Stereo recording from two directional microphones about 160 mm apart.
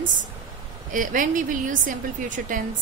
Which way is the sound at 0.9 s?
55° right (ahead or behind).